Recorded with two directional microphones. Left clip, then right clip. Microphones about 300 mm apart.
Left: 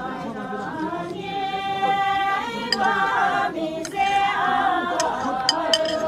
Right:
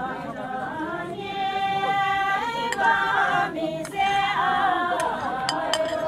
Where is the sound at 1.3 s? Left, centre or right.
Centre.